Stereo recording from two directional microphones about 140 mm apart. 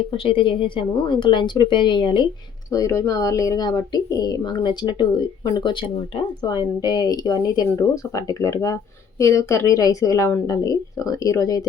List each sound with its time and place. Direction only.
0.1 s speech: 40° left (ahead or behind)
2.7 s speech: 20° left (ahead or behind)
6.8 s speech: 30° left (ahead or behind)